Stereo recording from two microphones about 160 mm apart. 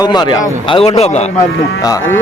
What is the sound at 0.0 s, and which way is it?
A man's voice, 25° left (ahead or behind).